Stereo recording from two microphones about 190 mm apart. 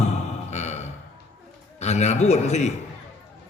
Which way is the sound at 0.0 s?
35° left (ahead or behind).